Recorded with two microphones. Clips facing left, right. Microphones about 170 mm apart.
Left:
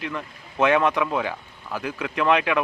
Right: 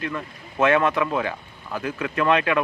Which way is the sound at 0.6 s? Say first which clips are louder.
Even; 15° left (ahead or behind).